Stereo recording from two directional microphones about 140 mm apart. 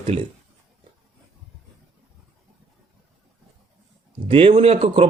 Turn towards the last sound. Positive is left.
turn(degrees=-45)  # may be behind; listen again after turning